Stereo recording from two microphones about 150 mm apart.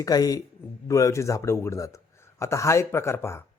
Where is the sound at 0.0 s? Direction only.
25° left (ahead or behind).